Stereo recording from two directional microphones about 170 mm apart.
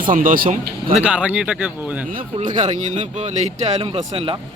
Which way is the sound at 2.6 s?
45° right (ahead or behind).